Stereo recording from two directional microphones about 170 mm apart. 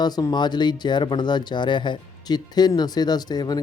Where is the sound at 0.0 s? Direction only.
25° left (ahead or behind).